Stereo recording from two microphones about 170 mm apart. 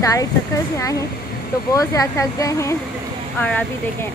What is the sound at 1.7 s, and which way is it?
A woman's voice, 20° left (ahead or behind).